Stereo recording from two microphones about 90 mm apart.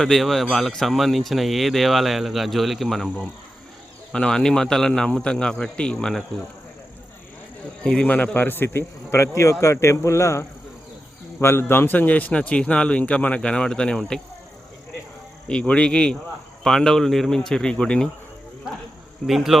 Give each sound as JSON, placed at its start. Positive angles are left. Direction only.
{"t": 0.0, "sound": "a man's voice", "side_deg": 0}
{"t": 7.9, "sound": "a man's voice", "side_deg": 15}
{"t": 15.4, "sound": "a man's voice", "side_deg": 10}
{"t": 19.3, "sound": "speech", "side_deg": -5}